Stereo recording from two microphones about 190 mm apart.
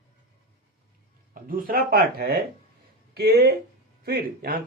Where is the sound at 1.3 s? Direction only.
50° right (ahead or behind).